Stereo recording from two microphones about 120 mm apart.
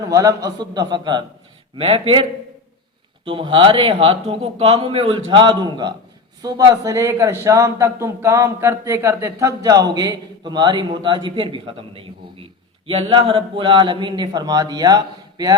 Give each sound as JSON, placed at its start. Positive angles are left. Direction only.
{"t": 0.0, "sound": "a man's voice", "side_deg": -30}
{"t": 1.7, "sound": "speech", "side_deg": -50}
{"t": 3.2, "sound": "a man's voice", "side_deg": -45}